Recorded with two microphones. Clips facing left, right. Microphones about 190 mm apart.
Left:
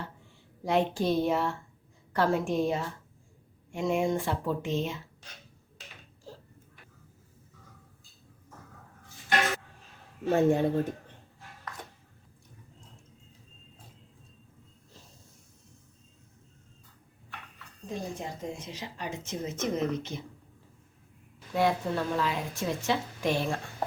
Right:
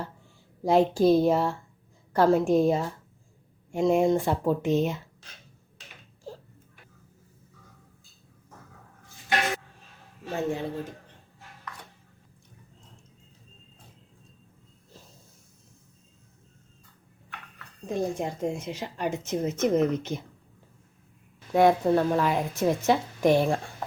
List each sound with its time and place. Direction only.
0.6 s speech: 35° right (ahead or behind)
10.2 s speech: 50° left (ahead or behind)
17.8 s a woman's voice: 55° right (ahead or behind)
21.5 s a woman's voice: 50° right (ahead or behind)